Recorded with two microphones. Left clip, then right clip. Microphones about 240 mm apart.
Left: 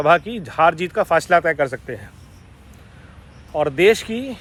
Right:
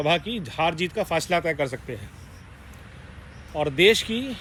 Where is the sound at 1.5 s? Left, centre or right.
Left.